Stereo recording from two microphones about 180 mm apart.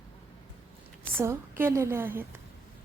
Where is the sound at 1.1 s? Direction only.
15° right (ahead or behind).